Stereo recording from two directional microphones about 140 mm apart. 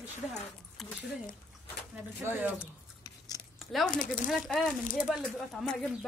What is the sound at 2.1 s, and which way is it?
Speech, 15° right (ahead or behind).